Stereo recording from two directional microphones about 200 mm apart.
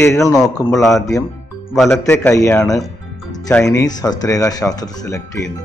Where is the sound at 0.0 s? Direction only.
15° left (ahead or behind).